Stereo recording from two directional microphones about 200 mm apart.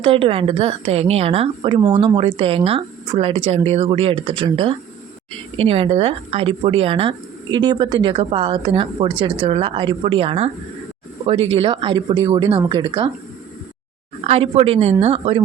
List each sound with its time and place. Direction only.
0.0 s speech: 25° right (ahead or behind)
14.3 s speech: 30° right (ahead or behind)